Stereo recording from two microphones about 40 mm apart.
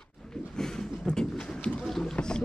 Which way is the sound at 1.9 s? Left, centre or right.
Centre.